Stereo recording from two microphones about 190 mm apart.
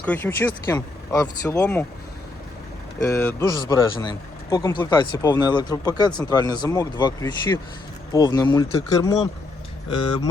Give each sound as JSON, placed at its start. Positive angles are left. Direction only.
{"t": 0.0, "sound": "speech", "side_deg": 10}
{"t": 1.5, "sound": "speech", "side_deg": 5}
{"t": 3.0, "sound": "speech", "side_deg": 15}